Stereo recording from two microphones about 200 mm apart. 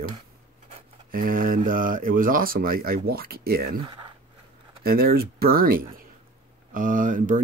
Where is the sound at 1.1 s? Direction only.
45° right (ahead or behind).